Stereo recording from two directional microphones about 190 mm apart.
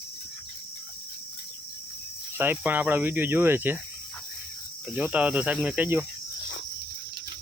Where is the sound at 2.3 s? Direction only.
10° right (ahead or behind).